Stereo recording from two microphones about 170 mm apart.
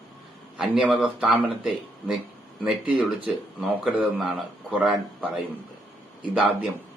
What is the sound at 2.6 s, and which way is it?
Speech, 10° right (ahead or behind).